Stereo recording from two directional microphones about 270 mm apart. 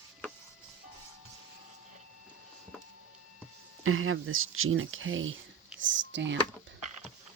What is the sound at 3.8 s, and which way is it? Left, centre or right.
Speech, right.